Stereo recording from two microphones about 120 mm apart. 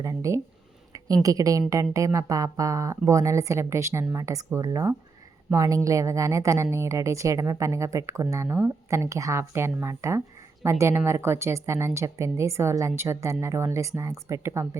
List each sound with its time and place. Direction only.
0.0 s a woman's voice: 25° right (ahead or behind)